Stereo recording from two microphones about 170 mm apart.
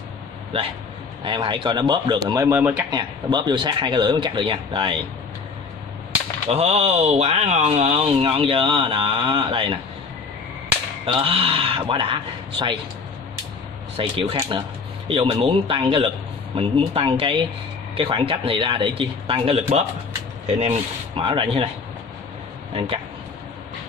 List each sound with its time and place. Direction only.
1.2 s speech: 30° right (ahead or behind)
2.9 s speech: 25° right (ahead or behind)
6.5 s speech: 35° right (ahead or behind)
11.1 s speech: 35° right (ahead or behind)
13.9 s speech: 30° right (ahead or behind)